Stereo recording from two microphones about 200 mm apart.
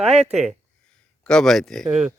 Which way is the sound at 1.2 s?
5° left (ahead or behind).